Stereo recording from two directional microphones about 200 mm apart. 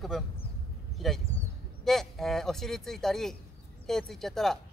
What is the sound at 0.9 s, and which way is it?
A man's voice, centre (ahead or behind).